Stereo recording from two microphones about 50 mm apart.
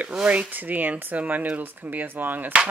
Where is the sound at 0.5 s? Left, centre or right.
Right.